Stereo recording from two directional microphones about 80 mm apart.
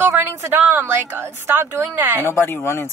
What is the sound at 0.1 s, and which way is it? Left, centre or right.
A woman's voice, right.